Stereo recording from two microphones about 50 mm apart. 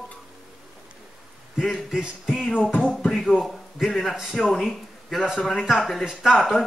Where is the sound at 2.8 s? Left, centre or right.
Centre.